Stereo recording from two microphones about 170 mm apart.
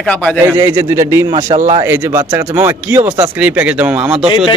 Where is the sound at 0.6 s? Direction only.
15° right (ahead or behind).